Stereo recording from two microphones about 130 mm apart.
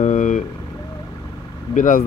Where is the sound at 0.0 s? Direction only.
80° left.